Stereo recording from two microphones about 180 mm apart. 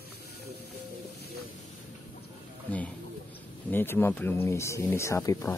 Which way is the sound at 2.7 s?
10° left (ahead or behind).